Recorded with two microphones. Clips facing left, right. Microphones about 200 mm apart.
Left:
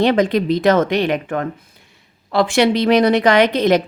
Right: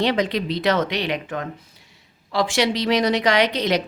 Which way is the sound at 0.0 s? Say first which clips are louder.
Left 6 dB; 50° left (ahead or behind).